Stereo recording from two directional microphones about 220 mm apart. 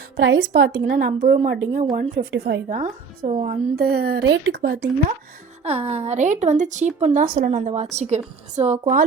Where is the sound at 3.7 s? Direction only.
45° right (ahead or behind).